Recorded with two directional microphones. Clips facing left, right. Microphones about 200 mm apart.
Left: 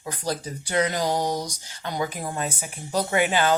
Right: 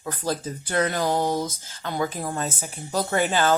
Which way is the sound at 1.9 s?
15° left (ahead or behind).